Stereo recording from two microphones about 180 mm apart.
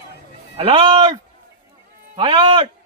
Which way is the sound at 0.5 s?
30° right (ahead or behind).